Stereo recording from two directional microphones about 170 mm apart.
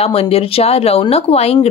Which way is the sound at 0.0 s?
35° left (ahead or behind).